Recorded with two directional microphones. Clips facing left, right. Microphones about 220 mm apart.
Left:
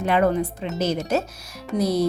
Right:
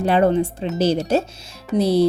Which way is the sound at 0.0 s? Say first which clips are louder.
Right 3 dB; 30° right (ahead or behind).